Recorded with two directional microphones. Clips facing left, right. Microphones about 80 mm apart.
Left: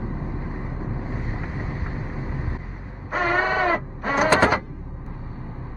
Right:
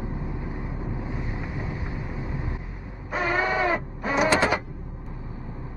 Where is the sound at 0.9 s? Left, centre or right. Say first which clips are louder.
Left 1 dB; left.